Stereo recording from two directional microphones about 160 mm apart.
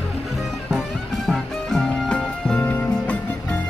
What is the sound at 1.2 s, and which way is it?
Music, centre (ahead or behind).